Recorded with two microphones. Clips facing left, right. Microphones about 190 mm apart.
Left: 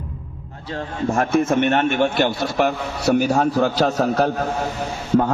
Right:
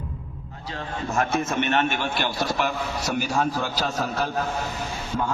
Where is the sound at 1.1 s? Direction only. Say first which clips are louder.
Left 6 dB; 55° left (ahead or behind).